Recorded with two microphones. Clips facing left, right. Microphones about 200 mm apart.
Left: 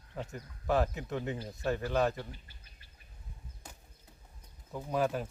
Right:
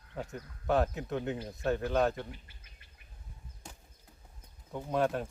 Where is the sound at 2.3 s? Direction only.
30° left (ahead or behind).